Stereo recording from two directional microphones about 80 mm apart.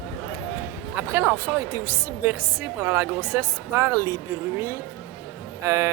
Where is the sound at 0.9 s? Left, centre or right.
Right.